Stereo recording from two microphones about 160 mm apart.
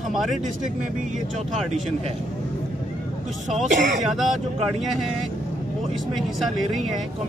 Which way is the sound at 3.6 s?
50° right (ahead or behind).